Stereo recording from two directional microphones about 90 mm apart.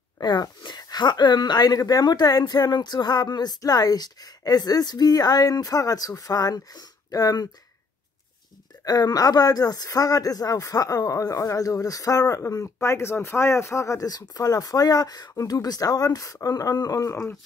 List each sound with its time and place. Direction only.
0.2 s speech: 55° left (ahead or behind)
8.8 s speech: 45° left (ahead or behind)